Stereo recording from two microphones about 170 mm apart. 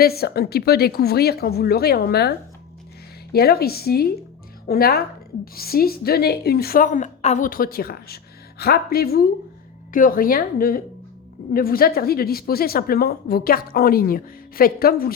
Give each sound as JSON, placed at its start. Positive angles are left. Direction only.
{"t": 0.0, "sound": "a woman's voice", "side_deg": 65}
{"t": 3.3, "sound": "a woman's voice", "side_deg": 65}